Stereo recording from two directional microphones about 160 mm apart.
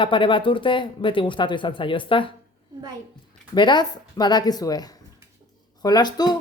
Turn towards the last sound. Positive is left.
turn(degrees=25)  # may be behind; listen again after turning